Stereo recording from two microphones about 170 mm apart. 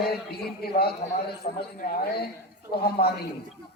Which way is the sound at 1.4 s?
40° left (ahead or behind).